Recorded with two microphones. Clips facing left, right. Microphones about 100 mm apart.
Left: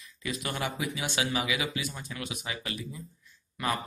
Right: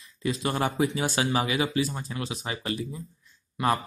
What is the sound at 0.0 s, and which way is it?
Speech, 30° right (ahead or behind).